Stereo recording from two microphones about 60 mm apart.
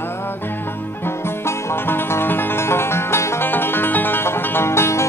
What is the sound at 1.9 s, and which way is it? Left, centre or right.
Music, left.